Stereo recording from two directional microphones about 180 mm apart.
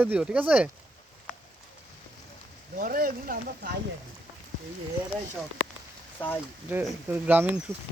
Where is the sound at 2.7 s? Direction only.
50° right (ahead or behind).